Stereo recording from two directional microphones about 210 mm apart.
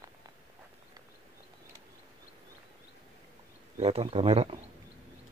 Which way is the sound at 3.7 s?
30° right (ahead or behind).